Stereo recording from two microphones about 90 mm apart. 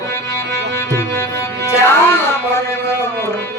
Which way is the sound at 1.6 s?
30° left (ahead or behind).